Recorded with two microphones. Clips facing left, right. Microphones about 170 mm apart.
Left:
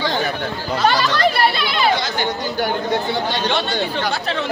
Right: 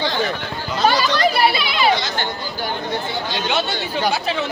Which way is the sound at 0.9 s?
Centre (ahead or behind).